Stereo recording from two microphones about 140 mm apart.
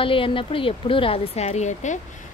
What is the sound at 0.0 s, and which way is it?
A woman's voice, 40° left (ahead or behind).